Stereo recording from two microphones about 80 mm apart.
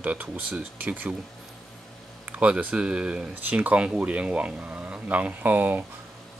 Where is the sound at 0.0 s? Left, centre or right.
Centre.